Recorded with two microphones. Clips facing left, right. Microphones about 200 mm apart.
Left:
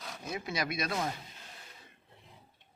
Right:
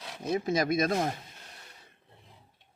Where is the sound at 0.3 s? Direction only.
40° right (ahead or behind).